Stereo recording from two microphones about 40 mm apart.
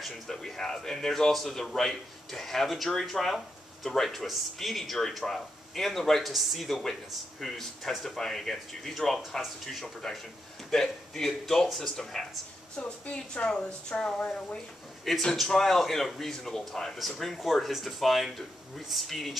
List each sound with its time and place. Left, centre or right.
0.3 s a man's voice: centre
12.8 s a woman's voice: left
15.3 s a man's voice: centre
17.6 s a man's voice: centre